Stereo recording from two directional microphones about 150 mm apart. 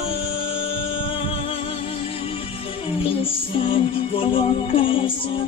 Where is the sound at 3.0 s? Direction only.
35° left (ahead or behind).